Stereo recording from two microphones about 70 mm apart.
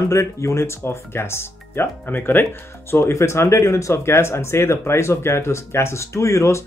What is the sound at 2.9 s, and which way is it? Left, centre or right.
Speech, left.